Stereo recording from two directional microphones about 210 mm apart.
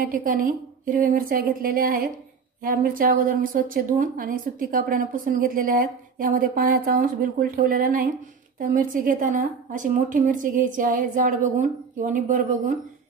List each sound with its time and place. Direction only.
0.0 s a woman's voice: 40° right (ahead or behind)